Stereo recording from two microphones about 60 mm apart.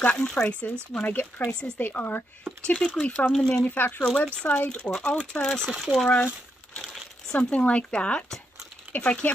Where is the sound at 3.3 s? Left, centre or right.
Centre.